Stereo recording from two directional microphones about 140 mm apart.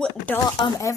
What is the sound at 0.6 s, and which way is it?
Speech, 25° left (ahead or behind).